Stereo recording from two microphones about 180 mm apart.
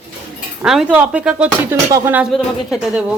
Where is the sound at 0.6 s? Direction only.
5° right (ahead or behind).